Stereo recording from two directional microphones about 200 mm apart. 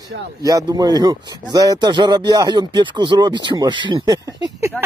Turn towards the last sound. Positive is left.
turn(degrees=-20)  # may be behind; listen again after turning